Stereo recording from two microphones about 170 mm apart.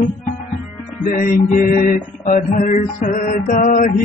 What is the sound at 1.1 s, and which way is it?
Music, 55° left (ahead or behind).